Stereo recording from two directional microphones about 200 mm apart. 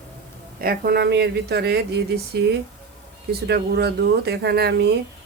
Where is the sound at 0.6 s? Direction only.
50° right (ahead or behind).